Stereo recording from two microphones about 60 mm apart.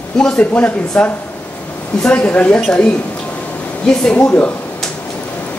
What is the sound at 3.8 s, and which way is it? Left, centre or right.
Speech, centre.